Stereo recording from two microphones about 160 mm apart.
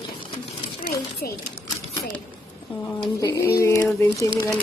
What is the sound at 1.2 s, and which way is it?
Speech, 65° left (ahead or behind).